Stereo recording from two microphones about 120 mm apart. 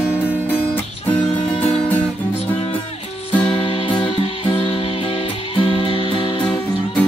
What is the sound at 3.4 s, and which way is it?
Music, 45° left (ahead or behind).